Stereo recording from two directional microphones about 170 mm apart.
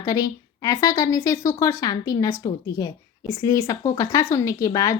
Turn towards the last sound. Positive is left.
turn(degrees=20)  # may be behind; listen again after turning